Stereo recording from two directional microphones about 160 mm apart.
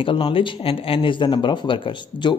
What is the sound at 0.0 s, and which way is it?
Speech, 30° left (ahead or behind).